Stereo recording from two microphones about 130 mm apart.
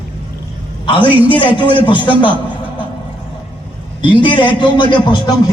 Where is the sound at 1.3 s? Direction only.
40° left (ahead or behind).